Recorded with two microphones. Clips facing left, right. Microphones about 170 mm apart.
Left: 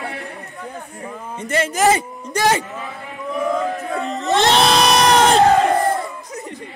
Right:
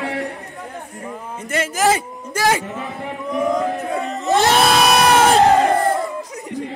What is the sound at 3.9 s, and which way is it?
Speech, 5° right (ahead or behind).